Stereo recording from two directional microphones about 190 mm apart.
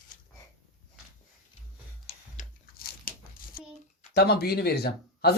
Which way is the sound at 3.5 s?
50° left (ahead or behind).